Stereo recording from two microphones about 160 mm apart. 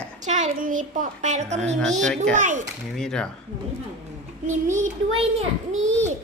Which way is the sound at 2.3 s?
50° right (ahead or behind).